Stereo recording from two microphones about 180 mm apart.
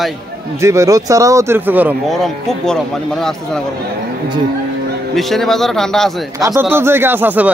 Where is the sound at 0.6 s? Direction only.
15° right (ahead or behind).